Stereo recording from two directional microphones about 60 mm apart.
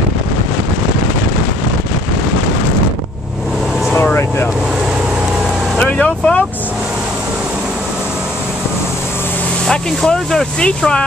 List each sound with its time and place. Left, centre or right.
3.9 s vehicle: left
5.8 s vehicle: centre
9.7 s speech: centre